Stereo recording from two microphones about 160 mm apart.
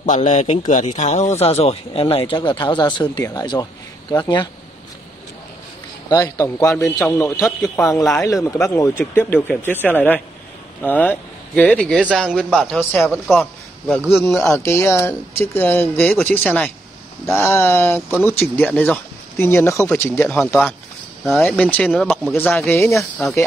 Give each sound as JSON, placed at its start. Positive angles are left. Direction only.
{"t": 0.0, "sound": "a man's voice", "side_deg": 50}
{"t": 6.2, "sound": "a man's voice", "side_deg": 20}
{"t": 14.5, "sound": "speech", "side_deg": 15}
{"t": 21.9, "sound": "a man's voice", "side_deg": -5}
{"t": 22.7, "sound": "speech", "side_deg": 15}